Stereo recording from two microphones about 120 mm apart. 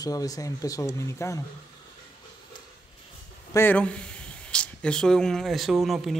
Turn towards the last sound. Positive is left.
turn(degrees=0)  # may be behind; listen again after turning